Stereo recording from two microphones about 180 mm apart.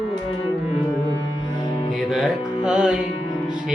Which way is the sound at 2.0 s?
Centre (ahead or behind).